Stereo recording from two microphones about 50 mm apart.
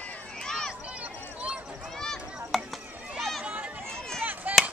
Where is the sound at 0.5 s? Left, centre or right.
Centre.